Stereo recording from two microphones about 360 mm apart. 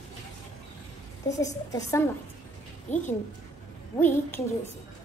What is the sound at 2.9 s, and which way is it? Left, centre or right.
Speech, centre.